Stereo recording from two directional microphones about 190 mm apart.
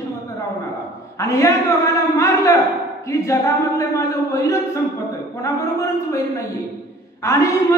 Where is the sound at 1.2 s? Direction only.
15° left (ahead or behind).